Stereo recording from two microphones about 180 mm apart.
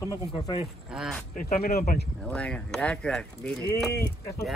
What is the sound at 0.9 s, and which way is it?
Speech, centre (ahead or behind).